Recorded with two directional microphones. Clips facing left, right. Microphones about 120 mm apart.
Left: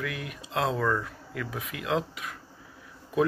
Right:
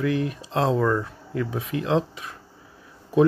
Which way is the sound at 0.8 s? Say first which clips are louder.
Right 5 dB; 20° right (ahead or behind).